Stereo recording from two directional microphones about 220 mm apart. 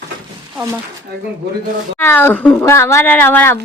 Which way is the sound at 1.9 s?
10° left (ahead or behind).